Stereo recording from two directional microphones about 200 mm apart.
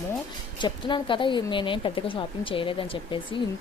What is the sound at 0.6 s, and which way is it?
Speech, 25° left (ahead or behind).